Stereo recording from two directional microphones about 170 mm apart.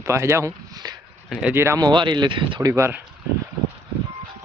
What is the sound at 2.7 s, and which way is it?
Speech, 15° right (ahead or behind).